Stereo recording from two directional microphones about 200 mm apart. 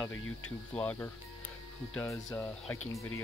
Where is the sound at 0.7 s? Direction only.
10° left (ahead or behind).